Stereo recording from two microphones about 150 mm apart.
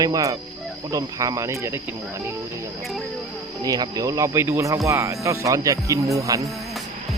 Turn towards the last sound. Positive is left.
turn(degrees=-20)  # may be behind; listen again after turning